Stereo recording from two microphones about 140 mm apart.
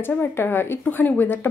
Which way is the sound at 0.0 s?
15° left (ahead or behind).